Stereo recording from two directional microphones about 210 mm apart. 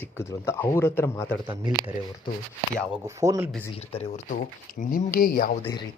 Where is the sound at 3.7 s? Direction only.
25° left (ahead or behind); by 5.6 s 45° left (ahead or behind).